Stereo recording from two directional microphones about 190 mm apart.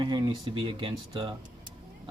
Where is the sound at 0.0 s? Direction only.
25° right (ahead or behind).